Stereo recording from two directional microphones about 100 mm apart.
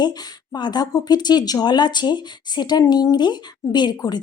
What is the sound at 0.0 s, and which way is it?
Speech, 45° left (ahead or behind).